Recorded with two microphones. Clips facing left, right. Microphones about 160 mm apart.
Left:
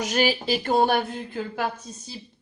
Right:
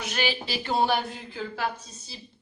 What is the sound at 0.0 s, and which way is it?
Speech, 40° left (ahead or behind).